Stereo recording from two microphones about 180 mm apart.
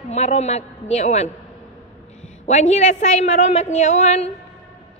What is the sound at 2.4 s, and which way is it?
A woman's voice, 40° left (ahead or behind).